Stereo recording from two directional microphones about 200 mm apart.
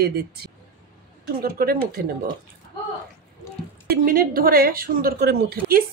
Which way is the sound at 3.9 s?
45° right (ahead or behind).